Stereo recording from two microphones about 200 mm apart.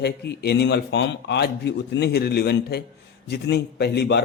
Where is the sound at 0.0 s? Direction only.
55° left (ahead or behind).